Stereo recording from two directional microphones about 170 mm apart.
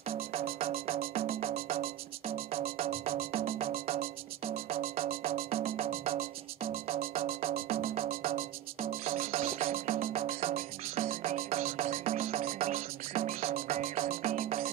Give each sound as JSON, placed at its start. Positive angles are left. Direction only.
{"t": 0.1, "sound": "music", "side_deg": -35}
{"t": 0.6, "sound": "music", "side_deg": -55}
{"t": 0.9, "sound": "music", "side_deg": -40}
{"t": 8.8, "sound": "music", "side_deg": -35}
{"t": 11.0, "sound": "music", "side_deg": -40}
{"t": 12.7, "sound": "music", "side_deg": -50}
{"t": 13.9, "sound": "music", "side_deg": -45}